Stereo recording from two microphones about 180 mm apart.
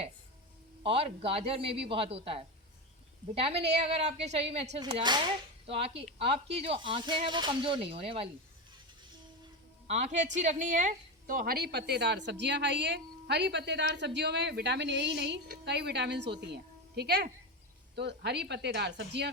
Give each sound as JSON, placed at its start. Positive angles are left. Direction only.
{"t": 0.8, "sound": "a man's voice", "side_deg": -30}
{"t": 9.8, "sound": "a woman's voice", "side_deg": -40}